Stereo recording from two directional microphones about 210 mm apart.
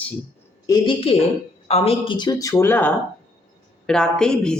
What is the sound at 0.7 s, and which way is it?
Speech, 25° left (ahead or behind).